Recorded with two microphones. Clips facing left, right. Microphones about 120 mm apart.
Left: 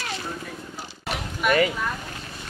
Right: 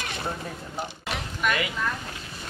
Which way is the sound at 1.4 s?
5° left (ahead or behind).